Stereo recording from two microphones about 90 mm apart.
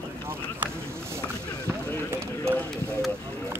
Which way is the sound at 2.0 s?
25° right (ahead or behind).